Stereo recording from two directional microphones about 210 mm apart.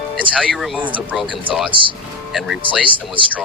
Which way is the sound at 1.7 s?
25° right (ahead or behind).